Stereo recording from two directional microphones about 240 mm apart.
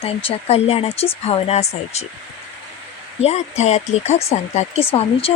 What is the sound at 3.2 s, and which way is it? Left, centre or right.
Speech, left.